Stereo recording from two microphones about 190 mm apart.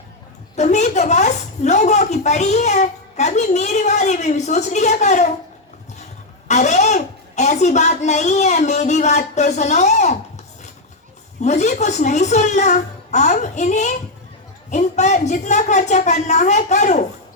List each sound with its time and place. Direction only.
0.5 s a woman's voice: 35° left (ahead or behind)
6.5 s a woman's voice: 35° left (ahead or behind)